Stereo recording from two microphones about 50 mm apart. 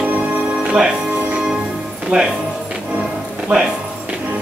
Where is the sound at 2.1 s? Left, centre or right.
Centre.